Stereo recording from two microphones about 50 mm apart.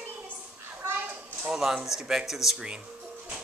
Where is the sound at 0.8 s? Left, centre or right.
Right.